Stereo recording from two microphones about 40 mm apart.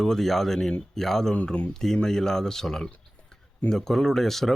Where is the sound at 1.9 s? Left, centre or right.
Centre.